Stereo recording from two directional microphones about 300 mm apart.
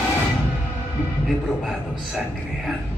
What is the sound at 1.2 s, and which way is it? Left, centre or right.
A man's voice, centre.